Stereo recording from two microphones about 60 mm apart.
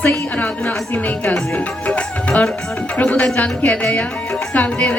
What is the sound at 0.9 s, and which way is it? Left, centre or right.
Speech, left.